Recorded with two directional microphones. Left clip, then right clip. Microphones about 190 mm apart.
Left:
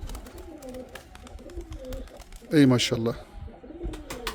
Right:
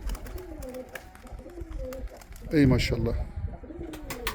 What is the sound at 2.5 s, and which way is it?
Speech, 15° left (ahead or behind).